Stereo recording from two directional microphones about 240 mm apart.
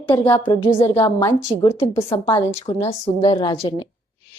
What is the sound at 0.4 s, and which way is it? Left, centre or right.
A woman's voice, centre.